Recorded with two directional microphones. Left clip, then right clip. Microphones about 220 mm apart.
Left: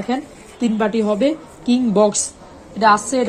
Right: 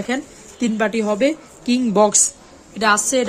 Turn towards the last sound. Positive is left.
turn(degrees=-25)  # may be behind; listen again after turning